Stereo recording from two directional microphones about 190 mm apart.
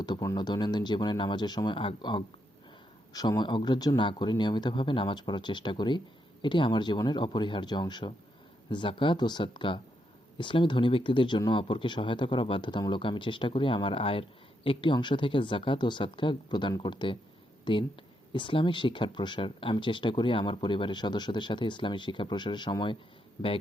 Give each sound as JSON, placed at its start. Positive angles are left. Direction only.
{"t": 0.0, "sound": "speech", "side_deg": 20}